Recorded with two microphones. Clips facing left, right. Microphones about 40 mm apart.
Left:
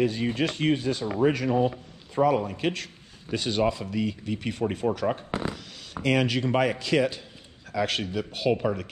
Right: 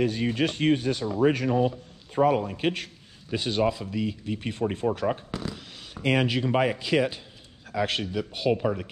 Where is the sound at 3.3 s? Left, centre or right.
Centre.